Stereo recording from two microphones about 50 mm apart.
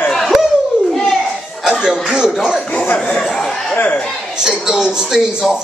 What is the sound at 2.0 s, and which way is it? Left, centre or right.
Speech, centre.